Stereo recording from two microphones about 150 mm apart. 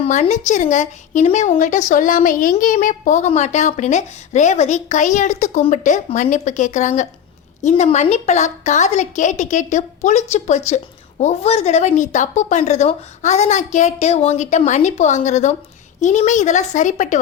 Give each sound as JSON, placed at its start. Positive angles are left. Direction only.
{"t": 0.0, "sound": "a woman's voice", "side_deg": 50}